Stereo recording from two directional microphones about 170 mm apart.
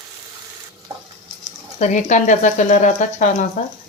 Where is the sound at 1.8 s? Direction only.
45° left (ahead or behind).